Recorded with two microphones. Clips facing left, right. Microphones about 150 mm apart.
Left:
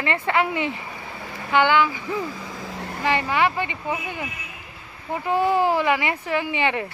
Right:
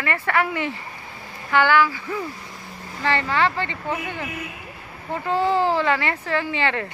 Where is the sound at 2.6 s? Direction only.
80° left.